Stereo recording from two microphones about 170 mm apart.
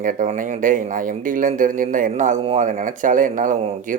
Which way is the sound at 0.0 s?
50° right (ahead or behind).